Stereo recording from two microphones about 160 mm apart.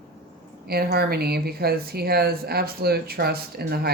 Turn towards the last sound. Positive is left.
turn(degrees=-80)